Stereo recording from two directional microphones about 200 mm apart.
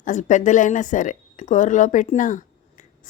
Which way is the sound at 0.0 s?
40° left (ahead or behind).